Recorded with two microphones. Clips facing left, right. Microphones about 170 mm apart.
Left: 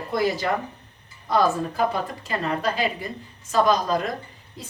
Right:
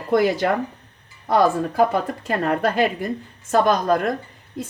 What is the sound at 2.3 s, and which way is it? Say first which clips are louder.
A woman's voice: right 5 dB; 55° right (ahead or behind).